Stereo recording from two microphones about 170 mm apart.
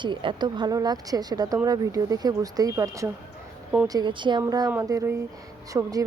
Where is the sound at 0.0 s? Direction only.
30° right (ahead or behind).